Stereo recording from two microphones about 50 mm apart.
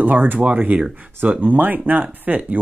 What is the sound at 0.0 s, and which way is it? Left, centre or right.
Speech, right.